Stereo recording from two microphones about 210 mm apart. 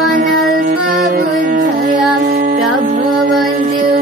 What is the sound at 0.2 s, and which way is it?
Music, 40° right (ahead or behind).